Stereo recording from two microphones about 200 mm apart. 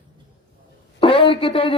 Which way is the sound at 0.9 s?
25° left (ahead or behind).